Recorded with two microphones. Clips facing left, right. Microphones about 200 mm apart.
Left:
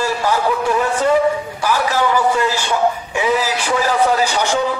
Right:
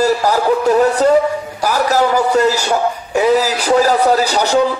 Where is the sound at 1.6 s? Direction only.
40° right (ahead or behind).